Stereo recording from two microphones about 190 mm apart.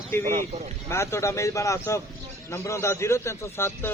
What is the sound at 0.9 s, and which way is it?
Speech, 15° left (ahead or behind).